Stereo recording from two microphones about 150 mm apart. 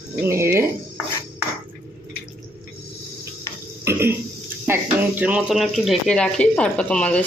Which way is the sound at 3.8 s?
15° right (ahead or behind).